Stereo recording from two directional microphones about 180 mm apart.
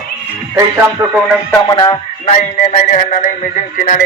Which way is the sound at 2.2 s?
40° left (ahead or behind).